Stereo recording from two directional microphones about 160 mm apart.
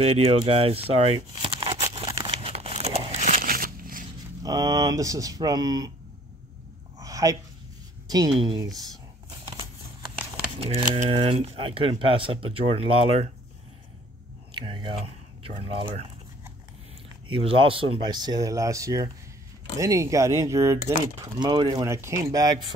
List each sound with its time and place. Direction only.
0.0 s a sound: 35° right (ahead or behind); by 4.0 s 60° right (ahead or behind)
4.4 s speech: 25° right (ahead or behind)
7.0 s a sound: 20° right (ahead or behind)
8.1 s speech: 25° right (ahead or behind)
10.6 s speech: 40° right (ahead or behind)
14.5 s speech: 30° right (ahead or behind)
17.3 s speech: 35° right (ahead or behind)